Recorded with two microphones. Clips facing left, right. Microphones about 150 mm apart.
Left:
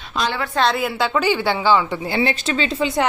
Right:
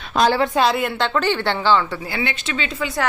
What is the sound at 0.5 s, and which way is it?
Speech, centre (ahead or behind).